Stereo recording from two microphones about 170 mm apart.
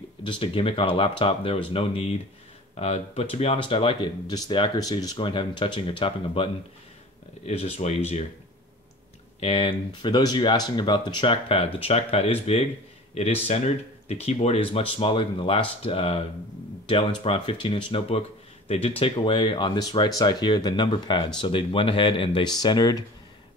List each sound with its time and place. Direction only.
0.2 s speech: 30° left (ahead or behind)
9.4 s speech: 35° left (ahead or behind)
17.2 s speech: 30° left (ahead or behind)